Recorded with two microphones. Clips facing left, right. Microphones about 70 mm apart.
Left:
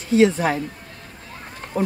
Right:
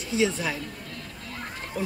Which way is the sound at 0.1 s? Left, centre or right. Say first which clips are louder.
Left 9 dB; left.